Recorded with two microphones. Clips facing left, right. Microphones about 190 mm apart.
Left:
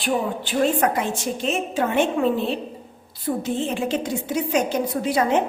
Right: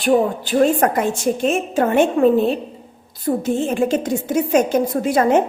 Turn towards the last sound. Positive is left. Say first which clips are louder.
# right 5 dB
turn(degrees=-50)  # may be behind; listen again after turning